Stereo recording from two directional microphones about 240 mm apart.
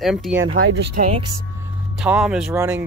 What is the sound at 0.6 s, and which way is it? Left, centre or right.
Speech, right.